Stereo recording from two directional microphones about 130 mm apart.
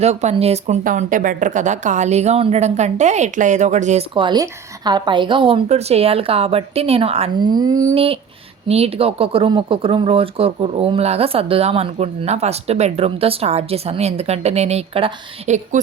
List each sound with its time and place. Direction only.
0.0 s a woman's voice: 55° right (ahead or behind)
0.9 s a woman's voice: 90° right; by 4.0 s 65° right (ahead or behind)
4.1 s a woman's voice: 35° right (ahead or behind)
5.6 s speech: 55° right (ahead or behind)
7.3 s a woman's voice: 35° right (ahead or behind)
7.9 s speech: 45° right (ahead or behind)
15.4 s a woman's voice: 65° right (ahead or behind)